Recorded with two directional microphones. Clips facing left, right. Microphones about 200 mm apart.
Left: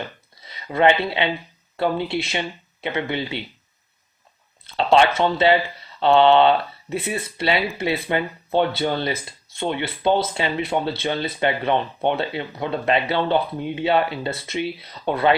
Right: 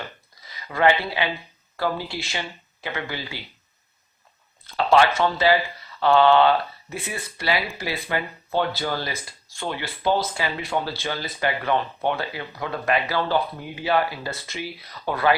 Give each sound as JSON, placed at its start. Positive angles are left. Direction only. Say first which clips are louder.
{"t": 0.4, "sound": "speech", "louder": "left 3 dB", "side_deg": 25}
{"t": 4.8, "sound": "speech", "louder": "left 2 dB", "side_deg": 25}